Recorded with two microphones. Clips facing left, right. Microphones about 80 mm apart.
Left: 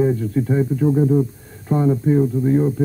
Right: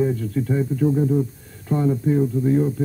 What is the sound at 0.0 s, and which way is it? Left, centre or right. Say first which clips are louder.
Speech: left 3 dB; left.